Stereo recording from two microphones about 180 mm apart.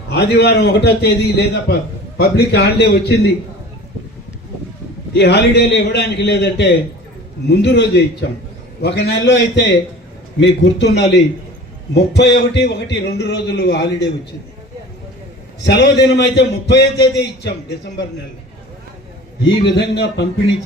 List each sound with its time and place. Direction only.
0.1 s a man's voice: 65° left (ahead or behind)
5.1 s a man's voice: 70° left (ahead or behind)
15.6 s a man's voice: 70° left (ahead or behind)
19.5 s a man's voice: 75° left (ahead or behind)